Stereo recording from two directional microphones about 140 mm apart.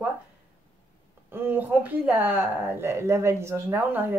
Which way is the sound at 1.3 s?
15° right (ahead or behind).